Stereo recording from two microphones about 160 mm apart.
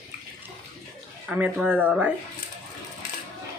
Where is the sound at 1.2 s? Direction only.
10° right (ahead or behind).